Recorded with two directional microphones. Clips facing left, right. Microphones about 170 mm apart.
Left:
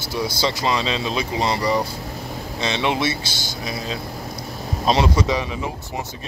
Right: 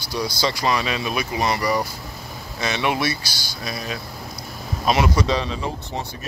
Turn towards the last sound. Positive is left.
turn(degrees=15)  # may be behind; listen again after turning